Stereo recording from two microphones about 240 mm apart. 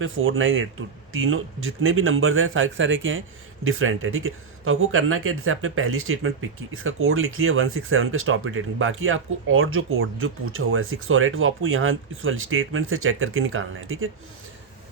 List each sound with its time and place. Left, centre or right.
0.0 s speech: right